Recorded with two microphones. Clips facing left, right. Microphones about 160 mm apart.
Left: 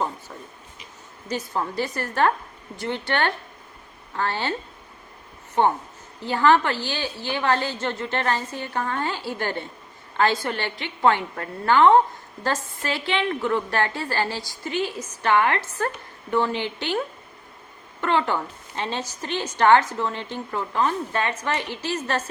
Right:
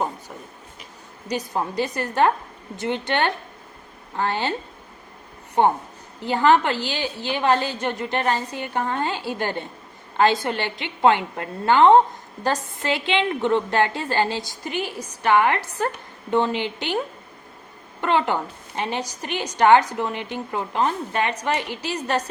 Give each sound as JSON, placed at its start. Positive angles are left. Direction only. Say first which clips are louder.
{"t": 1.3, "sound": "a woman's voice", "louder": "right 2 dB", "side_deg": -15}
{"t": 6.2, "sound": "a woman's voice", "louder": "right 1 dB", "side_deg": -15}
{"t": 18.0, "sound": "a woman's voice", "louder": "right 1 dB", "side_deg": -15}